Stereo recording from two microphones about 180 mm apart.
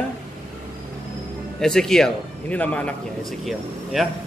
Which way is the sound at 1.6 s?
5° left (ahead or behind).